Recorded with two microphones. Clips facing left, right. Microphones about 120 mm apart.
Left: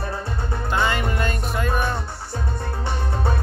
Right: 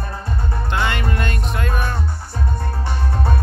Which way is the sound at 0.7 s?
5° left (ahead or behind).